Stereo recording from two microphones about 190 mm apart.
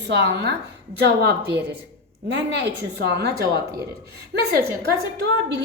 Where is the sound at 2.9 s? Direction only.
60° right (ahead or behind).